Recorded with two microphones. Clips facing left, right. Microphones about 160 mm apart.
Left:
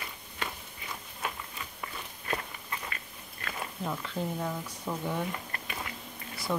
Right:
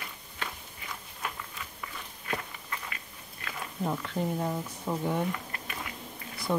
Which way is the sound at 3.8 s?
15° right (ahead or behind).